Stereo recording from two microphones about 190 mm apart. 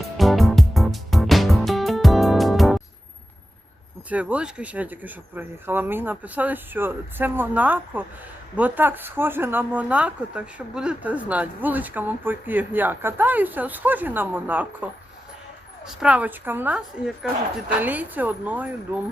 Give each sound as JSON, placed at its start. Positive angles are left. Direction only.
{"t": 0.2, "sound": "music", "side_deg": 0}
{"t": 4.1, "sound": "speech", "side_deg": -5}